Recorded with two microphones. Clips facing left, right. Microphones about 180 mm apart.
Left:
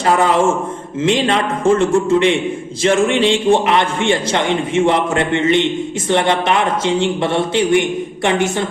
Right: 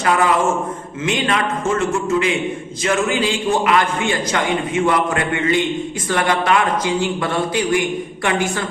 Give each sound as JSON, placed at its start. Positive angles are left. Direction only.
{"t": 0.0, "sound": "a man's voice", "side_deg": 30}